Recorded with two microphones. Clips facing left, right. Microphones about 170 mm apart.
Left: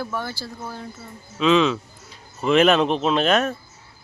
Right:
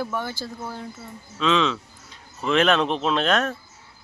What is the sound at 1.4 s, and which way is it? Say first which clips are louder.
Speech: left 4 dB; 5° left (ahead or behind).